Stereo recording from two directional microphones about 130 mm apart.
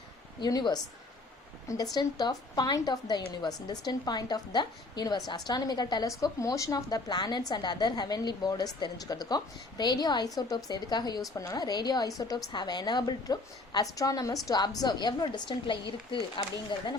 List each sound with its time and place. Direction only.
0.3 s a woman's voice: 30° left (ahead or behind)
2.0 s a woman's voice: 30° left (ahead or behind)